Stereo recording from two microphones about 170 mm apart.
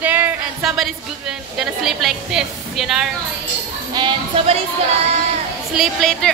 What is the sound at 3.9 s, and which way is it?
Speech, 30° right (ahead or behind).